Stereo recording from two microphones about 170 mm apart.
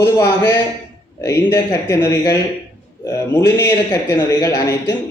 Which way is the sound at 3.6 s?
15° left (ahead or behind).